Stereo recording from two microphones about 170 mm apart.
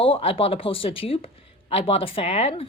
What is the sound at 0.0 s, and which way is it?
Speech, 35° left (ahead or behind).